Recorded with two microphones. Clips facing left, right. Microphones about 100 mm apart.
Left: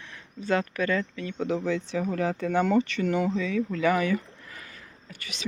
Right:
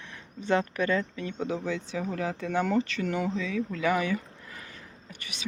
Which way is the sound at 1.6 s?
10° right (ahead or behind).